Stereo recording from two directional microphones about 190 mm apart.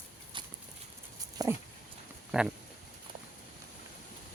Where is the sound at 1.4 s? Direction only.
20° right (ahead or behind).